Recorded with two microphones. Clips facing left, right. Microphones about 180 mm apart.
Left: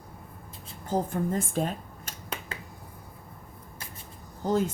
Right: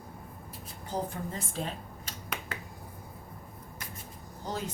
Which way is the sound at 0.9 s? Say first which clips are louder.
Left 7 dB; 50° left (ahead or behind).